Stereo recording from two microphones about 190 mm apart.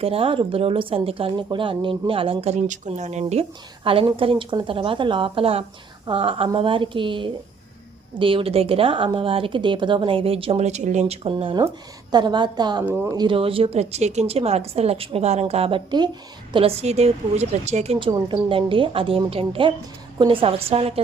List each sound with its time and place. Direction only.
0.0 s speech: 30° right (ahead or behind)
12.8 s speech: 10° right (ahead or behind); by 21.0 s 30° right (ahead or behind)